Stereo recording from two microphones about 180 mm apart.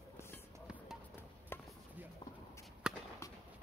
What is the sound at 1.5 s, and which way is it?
Chopping, 15° left (ahead or behind).